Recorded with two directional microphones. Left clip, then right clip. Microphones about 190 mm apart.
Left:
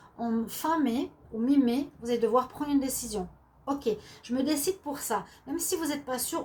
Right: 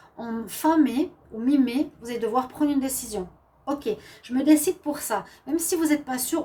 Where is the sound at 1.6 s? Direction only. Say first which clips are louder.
Right 1 dB; 40° right (ahead or behind).